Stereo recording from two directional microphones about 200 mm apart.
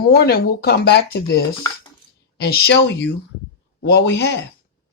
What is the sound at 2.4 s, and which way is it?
Speech, 50° left (ahead or behind).